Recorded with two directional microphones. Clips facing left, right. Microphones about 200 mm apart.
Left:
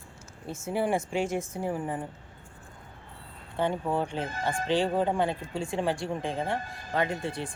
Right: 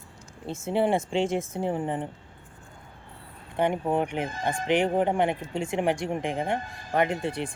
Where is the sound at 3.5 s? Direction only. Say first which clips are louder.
Right 3 dB; 20° right (ahead or behind).